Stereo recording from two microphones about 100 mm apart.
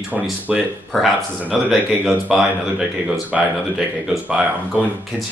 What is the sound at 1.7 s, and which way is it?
Speech, 5° right (ahead or behind).